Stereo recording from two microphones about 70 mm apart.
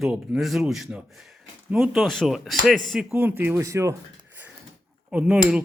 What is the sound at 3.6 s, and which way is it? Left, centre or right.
Speech, right.